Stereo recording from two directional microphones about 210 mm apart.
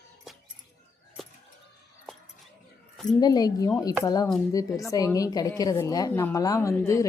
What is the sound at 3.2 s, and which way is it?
Speech, 20° left (ahead or behind).